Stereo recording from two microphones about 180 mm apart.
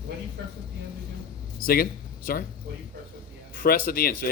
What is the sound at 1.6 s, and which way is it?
Speech, 55° left (ahead or behind).